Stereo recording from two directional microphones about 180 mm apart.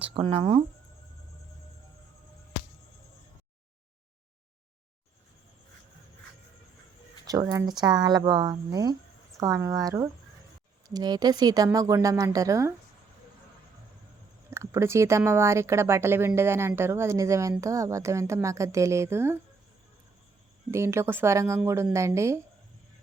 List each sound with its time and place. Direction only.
0.0 s speech: 30° right (ahead or behind)
7.3 s speech: 20° right (ahead or behind)
14.5 s speech: 15° right (ahead or behind)
20.7 s speech: 15° right (ahead or behind)